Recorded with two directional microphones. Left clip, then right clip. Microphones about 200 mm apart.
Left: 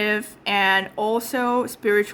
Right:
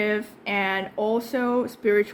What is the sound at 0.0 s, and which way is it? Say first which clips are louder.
A woman's voice: left 2 dB; 20° left (ahead or behind).